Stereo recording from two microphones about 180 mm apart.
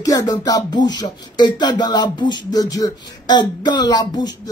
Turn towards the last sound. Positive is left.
turn(degrees=25)  # may be behind; listen again after turning